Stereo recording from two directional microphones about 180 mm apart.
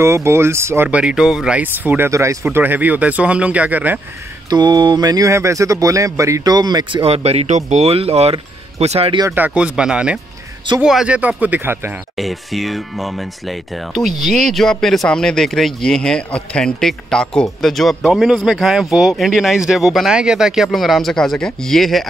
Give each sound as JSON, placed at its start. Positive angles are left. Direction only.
{"t": 0.0, "sound": "speech", "side_deg": -15}
{"t": 4.5, "sound": "speech", "side_deg": -25}
{"t": 9.2, "sound": "speech", "side_deg": -10}
{"t": 12.2, "sound": "speech", "side_deg": 0}